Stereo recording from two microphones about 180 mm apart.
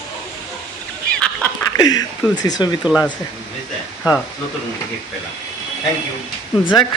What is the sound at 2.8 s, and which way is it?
Speech, centre (ahead or behind).